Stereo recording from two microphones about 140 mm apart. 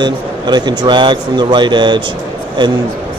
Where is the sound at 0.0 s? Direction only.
30° right (ahead or behind).